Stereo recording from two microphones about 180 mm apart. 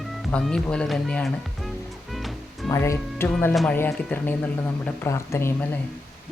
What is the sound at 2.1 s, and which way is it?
Music, centre (ahead or behind).